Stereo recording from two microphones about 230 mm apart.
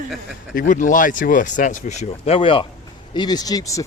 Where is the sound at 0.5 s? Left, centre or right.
Left.